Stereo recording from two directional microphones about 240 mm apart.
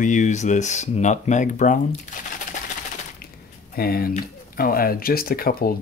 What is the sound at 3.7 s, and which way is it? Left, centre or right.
Speech, left.